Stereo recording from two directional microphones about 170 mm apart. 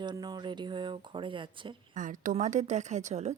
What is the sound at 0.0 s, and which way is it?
Speech, 25° right (ahead or behind).